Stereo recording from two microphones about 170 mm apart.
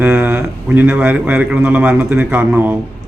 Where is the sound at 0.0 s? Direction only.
10° right (ahead or behind).